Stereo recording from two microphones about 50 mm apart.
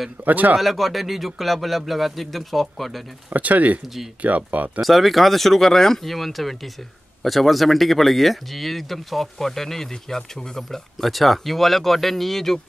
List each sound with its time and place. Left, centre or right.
0.2 s speech: right
0.6 s speech: centre
3.3 s speech: right
4.8 s speech: centre